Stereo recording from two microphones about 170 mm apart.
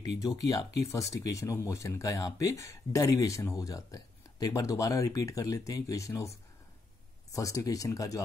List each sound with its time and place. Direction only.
0.0 s speech: 20° left (ahead or behind)
7.3 s speech: 20° left (ahead or behind)